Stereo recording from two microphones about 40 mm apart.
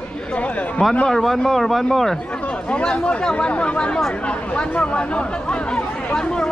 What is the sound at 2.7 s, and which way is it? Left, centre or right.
Speech, left.